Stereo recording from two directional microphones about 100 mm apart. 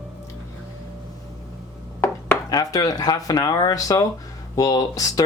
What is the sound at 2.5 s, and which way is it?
Speech, 40° left (ahead or behind).